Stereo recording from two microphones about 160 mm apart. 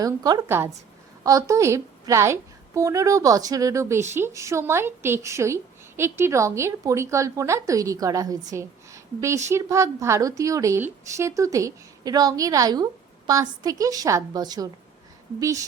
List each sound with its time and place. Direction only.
0.0 s a woman's voice: 25° right (ahead or behind)